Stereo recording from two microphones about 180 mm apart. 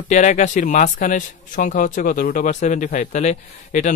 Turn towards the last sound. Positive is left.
turn(degrees=45)  # may be behind; listen again after turning